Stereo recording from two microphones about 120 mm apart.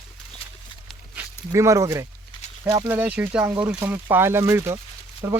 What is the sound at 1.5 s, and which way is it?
Speech, 25° right (ahead or behind).